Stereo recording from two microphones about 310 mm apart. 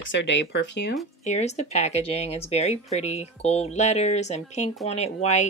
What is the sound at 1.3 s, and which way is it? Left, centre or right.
Speech, left.